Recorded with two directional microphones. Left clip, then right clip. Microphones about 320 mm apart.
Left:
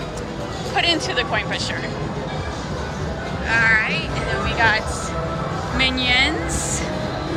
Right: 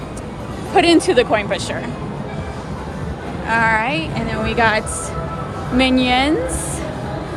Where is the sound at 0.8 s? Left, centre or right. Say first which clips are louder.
Right 7 dB; centre.